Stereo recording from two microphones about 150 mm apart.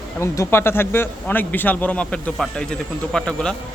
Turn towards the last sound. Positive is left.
turn(degrees=5)  # may be behind; listen again after turning